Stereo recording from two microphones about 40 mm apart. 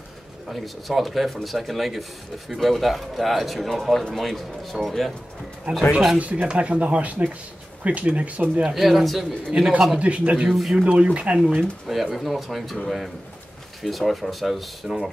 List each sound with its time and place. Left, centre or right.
0.5 s speech: centre
5.7 s speech: right
8.7 s speech: centre
9.9 s speech: right
11.9 s speech: centre